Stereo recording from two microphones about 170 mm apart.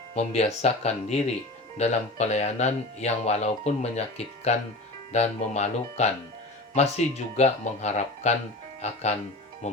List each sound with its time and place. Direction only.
0.2 s speech: 40° left (ahead or behind)